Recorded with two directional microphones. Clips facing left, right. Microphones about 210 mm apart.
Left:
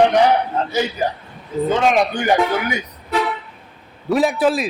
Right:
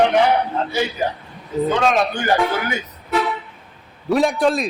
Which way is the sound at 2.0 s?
15° left (ahead or behind).